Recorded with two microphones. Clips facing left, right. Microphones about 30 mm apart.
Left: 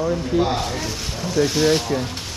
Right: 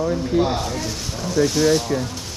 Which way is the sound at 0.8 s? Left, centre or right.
Left.